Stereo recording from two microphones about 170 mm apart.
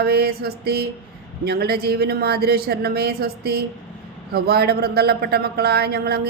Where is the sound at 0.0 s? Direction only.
65° right (ahead or behind).